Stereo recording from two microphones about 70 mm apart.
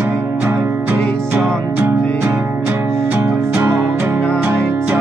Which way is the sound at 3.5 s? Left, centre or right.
Right.